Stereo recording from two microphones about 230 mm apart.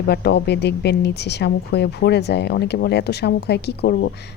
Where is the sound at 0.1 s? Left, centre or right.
Left.